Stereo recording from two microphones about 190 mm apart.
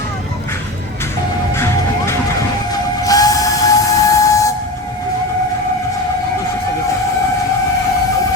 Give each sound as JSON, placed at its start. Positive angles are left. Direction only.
{"t": 3.1, "sound": "steam whistle", "side_deg": 20}